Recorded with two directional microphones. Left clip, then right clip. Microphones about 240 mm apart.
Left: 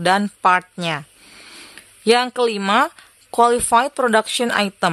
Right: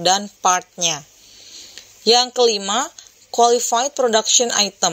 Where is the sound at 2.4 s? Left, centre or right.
Left.